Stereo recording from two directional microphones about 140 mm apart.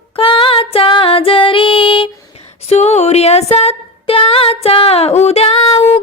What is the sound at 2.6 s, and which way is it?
Music, 50° left (ahead or behind).